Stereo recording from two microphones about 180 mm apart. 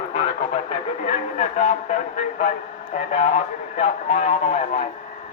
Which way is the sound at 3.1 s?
40° left (ahead or behind).